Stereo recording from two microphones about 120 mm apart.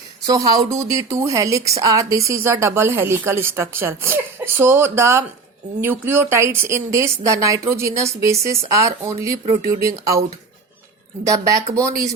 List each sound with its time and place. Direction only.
0.3 s a woman's voice: 30° right (ahead or behind)
11.3 s a woman's voice: 30° right (ahead or behind)